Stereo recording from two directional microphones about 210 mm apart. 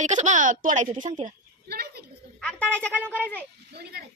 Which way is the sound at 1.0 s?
40° right (ahead or behind).